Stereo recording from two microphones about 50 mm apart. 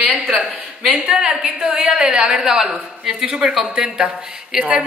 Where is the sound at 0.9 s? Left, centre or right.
Centre.